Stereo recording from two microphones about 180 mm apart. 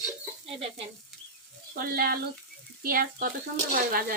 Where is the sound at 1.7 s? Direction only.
55° right (ahead or behind).